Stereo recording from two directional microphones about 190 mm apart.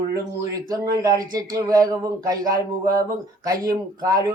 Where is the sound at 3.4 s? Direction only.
20° right (ahead or behind).